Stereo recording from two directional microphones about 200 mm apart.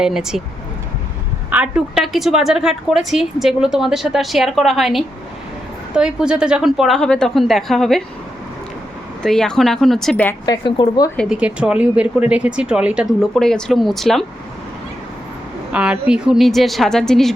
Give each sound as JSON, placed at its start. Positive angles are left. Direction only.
{"t": 0.0, "sound": "a woman's voice", "side_deg": -5}
{"t": 1.5, "sound": "a woman's voice", "side_deg": -5}
{"t": 9.2, "sound": "a woman's voice", "side_deg": 5}
{"t": 10.4, "sound": "speech", "side_deg": 20}
{"t": 11.2, "sound": "a woman's voice", "side_deg": -5}
{"t": 15.7, "sound": "a woman's voice", "side_deg": -5}